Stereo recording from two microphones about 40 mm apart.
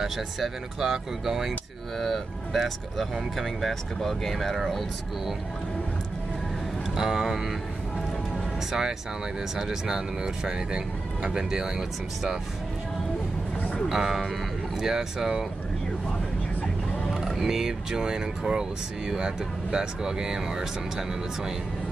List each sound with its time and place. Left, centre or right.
0.0 s speech: centre
7.0 s speech: centre
9.6 s speech: centre
13.8 s speech: centre
17.2 s speech: centre